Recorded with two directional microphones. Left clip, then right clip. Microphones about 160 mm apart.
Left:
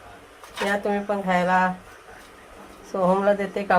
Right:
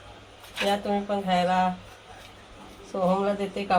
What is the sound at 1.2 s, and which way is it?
Speech, 80° left.